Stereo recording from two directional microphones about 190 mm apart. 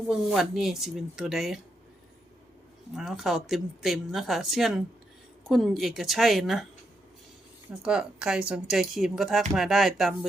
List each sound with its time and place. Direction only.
0.1 s speech: centre (ahead or behind)
2.9 s speech: centre (ahead or behind)
7.8 s speech: 5° right (ahead or behind)